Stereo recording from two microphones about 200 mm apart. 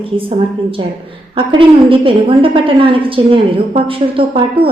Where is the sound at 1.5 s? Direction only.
25° right (ahead or behind).